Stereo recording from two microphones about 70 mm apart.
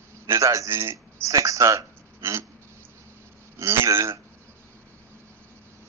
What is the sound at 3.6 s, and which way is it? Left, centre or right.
Speech, right.